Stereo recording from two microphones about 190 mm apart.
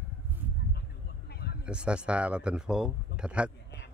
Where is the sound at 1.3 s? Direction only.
55° left (ahead or behind).